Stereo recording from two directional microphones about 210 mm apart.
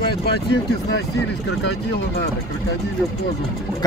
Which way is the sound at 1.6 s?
50° left (ahead or behind).